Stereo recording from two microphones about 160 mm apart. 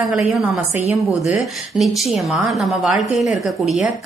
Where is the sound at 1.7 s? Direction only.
Centre (ahead or behind).